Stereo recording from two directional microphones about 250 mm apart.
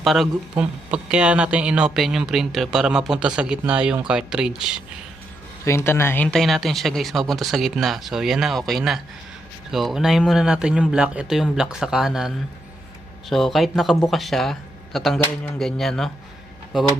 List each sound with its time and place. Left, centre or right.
0.0 s speech: centre
5.6 s speech: centre
13.3 s speech: centre